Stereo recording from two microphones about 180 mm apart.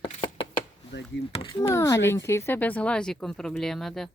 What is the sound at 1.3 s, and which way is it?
Speech, 25° left (ahead or behind).